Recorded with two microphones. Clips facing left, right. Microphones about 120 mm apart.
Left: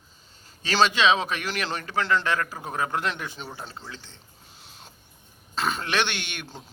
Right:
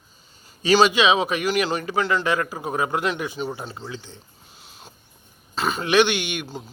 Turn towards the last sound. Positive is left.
turn(degrees=-5)  # may be behind; listen again after turning